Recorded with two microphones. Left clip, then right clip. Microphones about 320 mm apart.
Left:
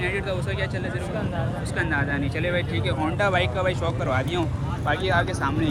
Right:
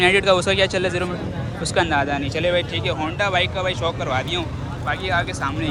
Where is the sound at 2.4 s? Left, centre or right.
Right.